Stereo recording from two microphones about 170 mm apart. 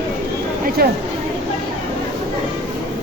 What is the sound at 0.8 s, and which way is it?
Speech, 65° right (ahead or behind).